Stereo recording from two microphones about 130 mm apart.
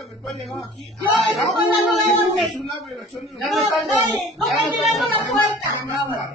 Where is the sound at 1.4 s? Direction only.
Centre (ahead or behind).